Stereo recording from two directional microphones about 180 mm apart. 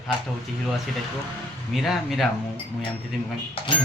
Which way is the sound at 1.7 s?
Centre (ahead or behind).